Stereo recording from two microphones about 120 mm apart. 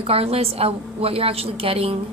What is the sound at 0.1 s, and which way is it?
A woman's voice, 55° right (ahead or behind).